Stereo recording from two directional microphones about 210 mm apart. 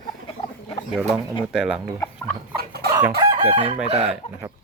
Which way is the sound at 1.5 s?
5° right (ahead or behind).